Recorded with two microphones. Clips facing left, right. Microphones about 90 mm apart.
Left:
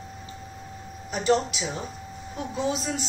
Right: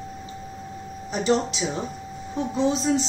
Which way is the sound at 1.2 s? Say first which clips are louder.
Right 1 dB; 30° right (ahead or behind).